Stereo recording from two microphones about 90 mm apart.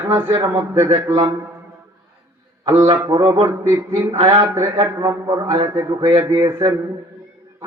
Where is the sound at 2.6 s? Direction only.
75° right (ahead or behind).